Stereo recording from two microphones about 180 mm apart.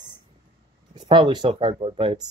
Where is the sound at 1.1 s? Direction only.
25° right (ahead or behind).